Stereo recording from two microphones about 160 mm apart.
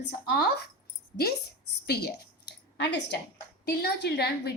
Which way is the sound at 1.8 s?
90° left.